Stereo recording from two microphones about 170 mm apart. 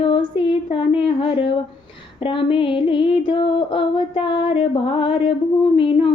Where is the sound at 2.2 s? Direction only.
30° left (ahead or behind).